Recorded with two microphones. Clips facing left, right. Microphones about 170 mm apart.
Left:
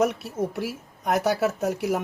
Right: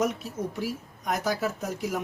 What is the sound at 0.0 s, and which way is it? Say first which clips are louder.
A woman's voice: left 4 dB; 70° left (ahead or behind).